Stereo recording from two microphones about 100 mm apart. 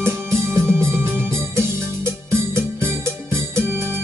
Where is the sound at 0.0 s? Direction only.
25° right (ahead or behind).